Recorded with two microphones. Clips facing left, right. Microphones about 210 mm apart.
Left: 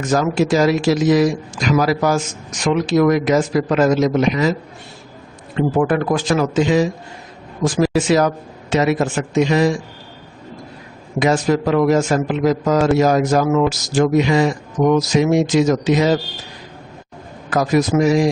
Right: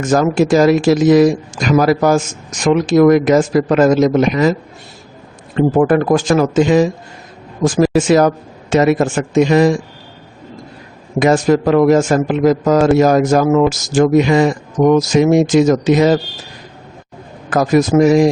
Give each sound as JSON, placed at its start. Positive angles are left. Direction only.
{"t": 0.0, "sound": "a man's voice", "side_deg": -50}
{"t": 5.5, "sound": "a man's voice", "side_deg": -45}
{"t": 11.2, "sound": "a man's voice", "side_deg": -50}
{"t": 17.5, "sound": "a man's voice", "side_deg": -45}